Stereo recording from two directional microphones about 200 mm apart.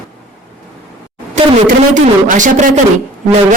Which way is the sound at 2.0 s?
40° right (ahead or behind).